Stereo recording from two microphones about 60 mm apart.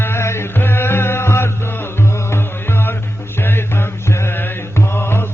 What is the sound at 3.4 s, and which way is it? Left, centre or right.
Mantra, left.